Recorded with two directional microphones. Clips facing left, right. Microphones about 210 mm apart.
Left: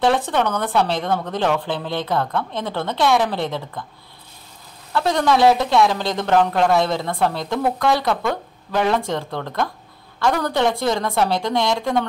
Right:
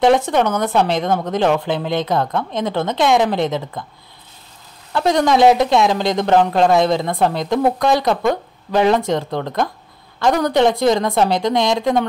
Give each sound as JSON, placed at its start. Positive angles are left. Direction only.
{"t": 0.0, "sound": "speech", "side_deg": -15}
{"t": 4.9, "sound": "speech", "side_deg": -15}